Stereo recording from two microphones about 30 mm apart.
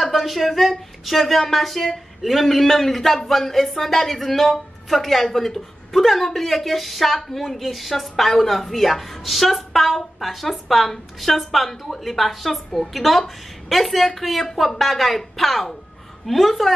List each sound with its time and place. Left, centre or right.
0.0 s a woman's voice: centre